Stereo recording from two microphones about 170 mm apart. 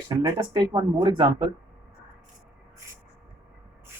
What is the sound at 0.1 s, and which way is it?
Speech, 20° right (ahead or behind).